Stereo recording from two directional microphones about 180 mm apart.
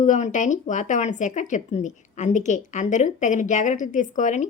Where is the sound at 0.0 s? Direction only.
45° left (ahead or behind).